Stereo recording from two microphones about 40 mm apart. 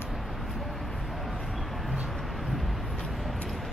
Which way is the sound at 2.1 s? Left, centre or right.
Centre.